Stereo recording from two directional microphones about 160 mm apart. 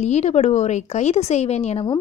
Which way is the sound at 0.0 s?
45° left (ahead or behind).